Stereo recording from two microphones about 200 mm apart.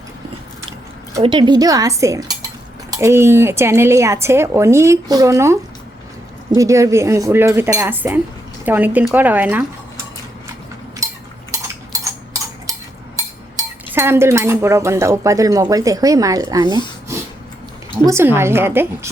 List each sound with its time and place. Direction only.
1.2 s speech: 25° right (ahead or behind)
6.6 s speech: 15° right (ahead or behind)
11.5 s cutlery: 15° right (ahead or behind)
13.6 s speech: 10° right (ahead or behind)
17.9 s speech: 10° right (ahead or behind)